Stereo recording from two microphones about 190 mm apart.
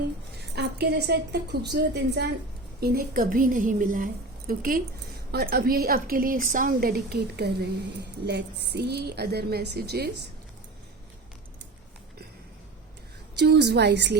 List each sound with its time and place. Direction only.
0.5 s a woman's voice: 60° right (ahead or behind)
2.8 s a woman's voice: 50° right (ahead or behind)
13.3 s a woman's voice: 60° right (ahead or behind)